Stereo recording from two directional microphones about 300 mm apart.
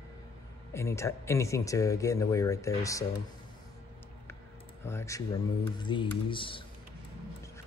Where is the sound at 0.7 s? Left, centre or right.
Centre.